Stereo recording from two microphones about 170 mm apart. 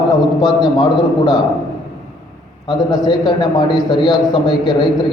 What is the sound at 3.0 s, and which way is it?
A man's voice, 25° left (ahead or behind).